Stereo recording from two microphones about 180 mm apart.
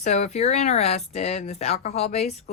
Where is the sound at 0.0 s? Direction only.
40° left (ahead or behind).